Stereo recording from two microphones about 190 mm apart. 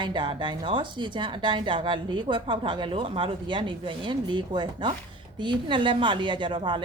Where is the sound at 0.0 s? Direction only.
25° right (ahead or behind).